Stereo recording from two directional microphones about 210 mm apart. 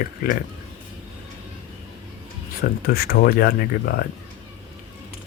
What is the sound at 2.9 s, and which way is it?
Speech, 45° left (ahead or behind).